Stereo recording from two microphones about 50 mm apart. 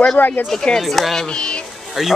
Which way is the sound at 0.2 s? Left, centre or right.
Left.